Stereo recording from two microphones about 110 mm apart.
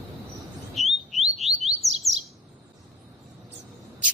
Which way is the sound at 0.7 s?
Centre (ahead or behind).